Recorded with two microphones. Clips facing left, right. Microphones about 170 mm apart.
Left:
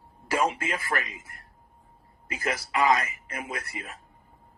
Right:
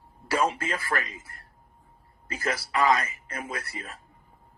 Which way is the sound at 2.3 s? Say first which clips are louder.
Even; 20° left (ahead or behind).